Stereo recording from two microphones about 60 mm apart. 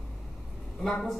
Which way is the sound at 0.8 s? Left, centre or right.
Centre.